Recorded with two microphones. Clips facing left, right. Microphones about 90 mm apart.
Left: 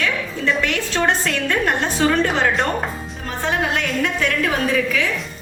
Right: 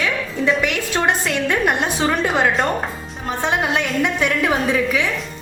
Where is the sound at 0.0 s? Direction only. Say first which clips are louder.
Right 2 dB; 10° right (ahead or behind).